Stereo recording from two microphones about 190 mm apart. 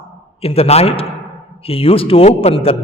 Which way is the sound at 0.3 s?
30° left (ahead or behind).